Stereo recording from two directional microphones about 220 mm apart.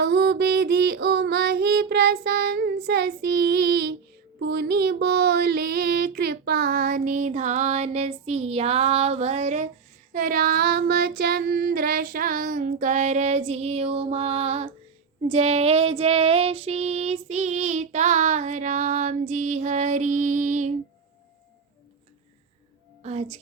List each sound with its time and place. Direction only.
0.0 s female singing: 50° right (ahead or behind)
4.4 s a sound: 50° right (ahead or behind); by 9.6 s 30° right (ahead or behind)
10.1 s female singing: 40° right (ahead or behind)
23.0 s speech: 30° right (ahead or behind)